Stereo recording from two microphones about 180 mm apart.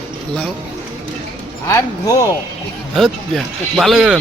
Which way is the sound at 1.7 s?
20° left (ahead or behind).